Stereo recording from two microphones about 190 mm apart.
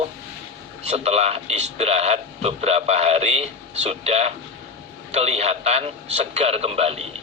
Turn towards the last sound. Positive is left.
turn(degrees=-30)  # may be behind; listen again after turning